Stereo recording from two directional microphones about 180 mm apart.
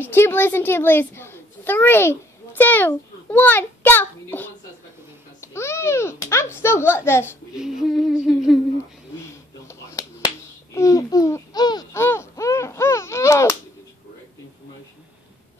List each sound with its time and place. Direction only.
0.0 s a woman's voice: 10° left (ahead or behind)
7.5 s humming: centre (ahead or behind)
9.2 s a sound: 15° left (ahead or behind)
10.7 s speech: 20° left (ahead or behind)